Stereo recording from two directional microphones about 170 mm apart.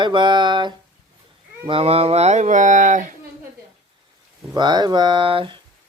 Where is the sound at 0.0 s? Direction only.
25° right (ahead or behind); by 3.1 s 50° right (ahead or behind).